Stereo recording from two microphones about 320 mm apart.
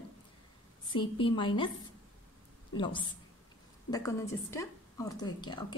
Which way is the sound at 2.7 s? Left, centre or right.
Centre.